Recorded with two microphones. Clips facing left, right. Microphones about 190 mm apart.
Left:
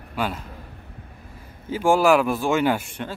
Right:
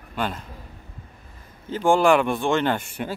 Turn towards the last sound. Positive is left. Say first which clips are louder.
# right 2 dB
turn(degrees=-5)  # may be behind; listen again after turning